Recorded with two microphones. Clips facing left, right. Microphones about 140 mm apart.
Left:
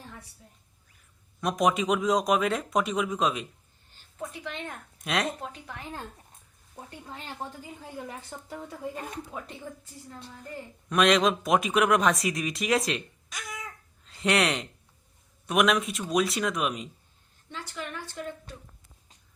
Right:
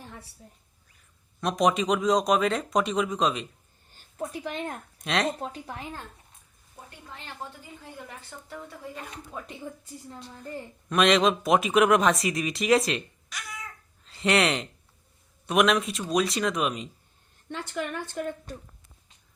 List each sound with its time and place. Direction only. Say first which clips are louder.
1.4 s speech: right 1 dB; centre (ahead or behind)
3.9 s a woman's voice: right 4 dB; 35° right (ahead or behind)
4.9 s a woman's voice: right 2 dB; centre (ahead or behind)
5.4 s a woman's voice: right 4 dB; 30° right (ahead or behind)
8.0 s a woman's voice: left 4 dB; 15° left (ahead or behind)
10.8 s speech: right 1 dB; centre (ahead or behind)
14.1 s speech: right 2 dB; centre (ahead or behind)
17.5 s a woman's voice: right 6 dB; 55° right (ahead or behind)